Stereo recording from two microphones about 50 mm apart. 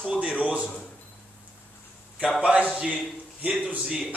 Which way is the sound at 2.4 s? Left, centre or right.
Right.